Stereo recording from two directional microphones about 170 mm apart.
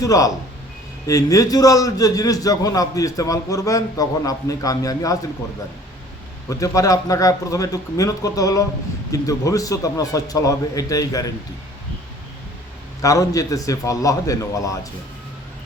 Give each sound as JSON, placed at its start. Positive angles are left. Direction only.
{"t": 0.0, "sound": "a man's voice", "side_deg": 20}
{"t": 6.5, "sound": "a man's voice", "side_deg": 20}
{"t": 13.0, "sound": "a man's voice", "side_deg": 20}